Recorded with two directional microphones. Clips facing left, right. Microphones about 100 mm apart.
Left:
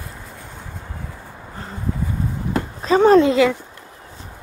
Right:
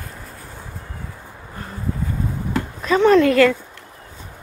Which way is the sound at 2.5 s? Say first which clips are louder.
Left 2 dB; 30° left (ahead or behind).